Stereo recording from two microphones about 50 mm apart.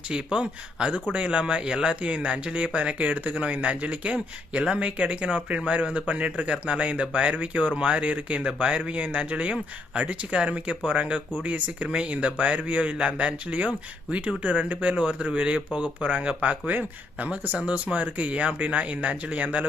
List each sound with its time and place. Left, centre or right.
0.1 s speech: centre